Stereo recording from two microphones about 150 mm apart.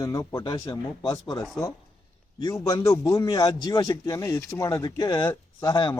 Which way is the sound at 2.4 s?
20° left (ahead or behind).